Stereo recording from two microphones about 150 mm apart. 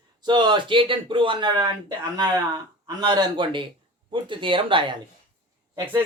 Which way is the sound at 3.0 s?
25° right (ahead or behind).